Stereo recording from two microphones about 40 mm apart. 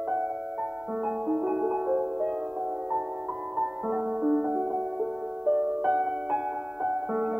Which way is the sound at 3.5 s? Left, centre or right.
Centre.